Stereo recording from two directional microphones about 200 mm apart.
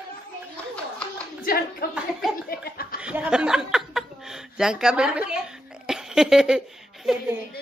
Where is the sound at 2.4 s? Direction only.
50° left (ahead or behind).